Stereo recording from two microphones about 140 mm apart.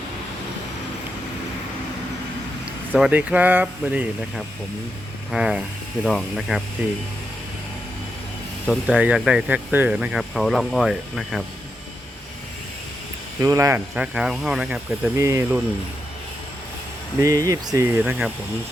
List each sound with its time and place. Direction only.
3.1 s speech: 10° right (ahead or behind)
5.3 s speech: 5° right (ahead or behind)
8.6 s speech: 5° right (ahead or behind)
13.4 s speech: 20° right (ahead or behind)
13.9 s speech: 5° right (ahead or behind)
15.2 s speech: 20° right (ahead or behind)
17.2 s speech: 20° right (ahead or behind)